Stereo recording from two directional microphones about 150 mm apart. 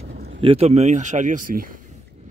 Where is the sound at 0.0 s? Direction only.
90° right.